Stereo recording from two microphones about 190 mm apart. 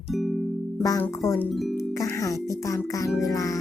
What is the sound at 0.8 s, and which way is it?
Speech, 15° left (ahead or behind).